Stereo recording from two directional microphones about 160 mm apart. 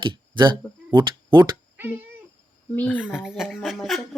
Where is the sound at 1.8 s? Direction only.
15° right (ahead or behind).